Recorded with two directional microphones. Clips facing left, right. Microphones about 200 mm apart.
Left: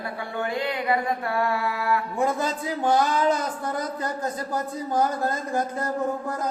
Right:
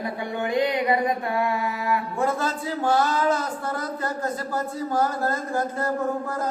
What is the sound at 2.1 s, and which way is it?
A man's voice, 15° left (ahead or behind).